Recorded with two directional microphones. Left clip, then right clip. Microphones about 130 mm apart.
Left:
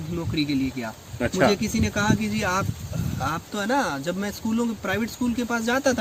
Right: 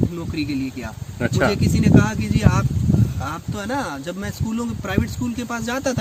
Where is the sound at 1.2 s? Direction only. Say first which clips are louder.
Right 1 dB; 25° right (ahead or behind).